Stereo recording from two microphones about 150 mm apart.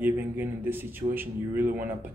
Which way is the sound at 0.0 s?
15° right (ahead or behind).